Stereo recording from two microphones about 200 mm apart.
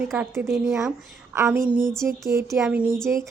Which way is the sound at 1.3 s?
10° right (ahead or behind).